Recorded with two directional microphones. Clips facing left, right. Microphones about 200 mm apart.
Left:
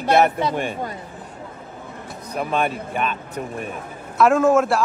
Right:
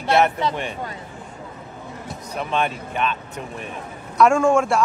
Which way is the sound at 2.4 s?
5° left (ahead or behind).